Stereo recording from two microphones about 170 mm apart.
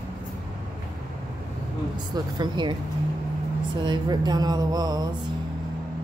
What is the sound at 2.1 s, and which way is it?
Speech, 25° right (ahead or behind).